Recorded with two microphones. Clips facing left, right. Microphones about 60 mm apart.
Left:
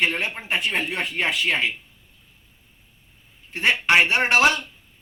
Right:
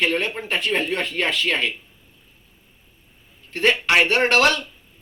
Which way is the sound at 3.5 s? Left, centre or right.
Left.